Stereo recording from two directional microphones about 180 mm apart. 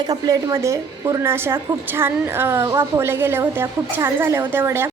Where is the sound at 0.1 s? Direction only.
20° right (ahead or behind).